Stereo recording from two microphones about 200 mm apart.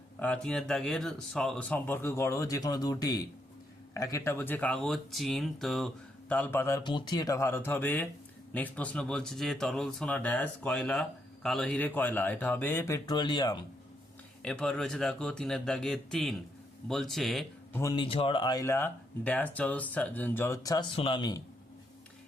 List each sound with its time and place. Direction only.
0.2 s speech: 5° left (ahead or behind); by 13.6 s 20° left (ahead or behind)
14.4 s speech: 5° left (ahead or behind)
17.7 s a man's voice: 20° left (ahead or behind)